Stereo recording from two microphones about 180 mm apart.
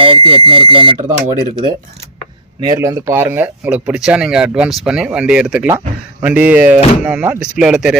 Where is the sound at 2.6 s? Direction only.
20° right (ahead or behind).